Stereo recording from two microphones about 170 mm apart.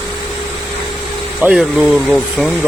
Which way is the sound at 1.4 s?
5° right (ahead or behind).